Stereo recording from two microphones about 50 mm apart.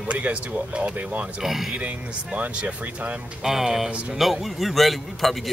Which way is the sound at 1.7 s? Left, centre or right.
Right.